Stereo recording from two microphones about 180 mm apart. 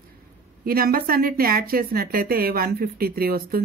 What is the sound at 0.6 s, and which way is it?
Speech, 55° right (ahead or behind).